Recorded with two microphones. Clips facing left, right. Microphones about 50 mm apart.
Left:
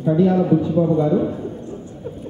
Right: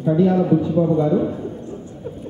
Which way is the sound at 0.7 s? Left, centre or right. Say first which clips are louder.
Even; centre.